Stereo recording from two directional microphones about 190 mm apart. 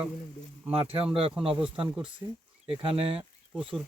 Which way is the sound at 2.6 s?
30° right (ahead or behind).